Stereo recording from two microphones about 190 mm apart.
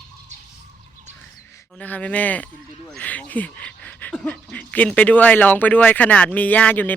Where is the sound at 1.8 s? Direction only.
10° left (ahead or behind).